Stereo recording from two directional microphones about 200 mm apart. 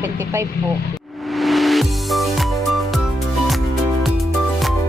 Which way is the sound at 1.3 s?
Centre (ahead or behind).